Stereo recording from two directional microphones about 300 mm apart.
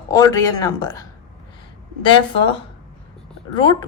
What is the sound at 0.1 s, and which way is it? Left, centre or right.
A woman's voice, centre.